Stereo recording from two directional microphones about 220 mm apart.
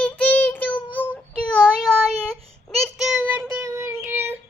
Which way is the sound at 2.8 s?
Centre (ahead or behind).